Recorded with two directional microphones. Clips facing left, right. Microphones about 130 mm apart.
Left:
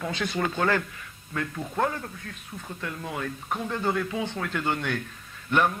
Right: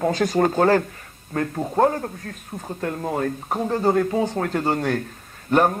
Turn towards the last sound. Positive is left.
turn(degrees=-40)  # may be behind; listen again after turning